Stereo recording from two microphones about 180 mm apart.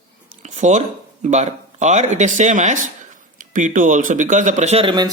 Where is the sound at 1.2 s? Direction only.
40° right (ahead or behind).